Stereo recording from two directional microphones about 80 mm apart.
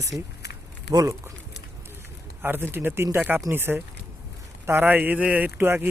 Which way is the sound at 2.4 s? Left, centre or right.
Right.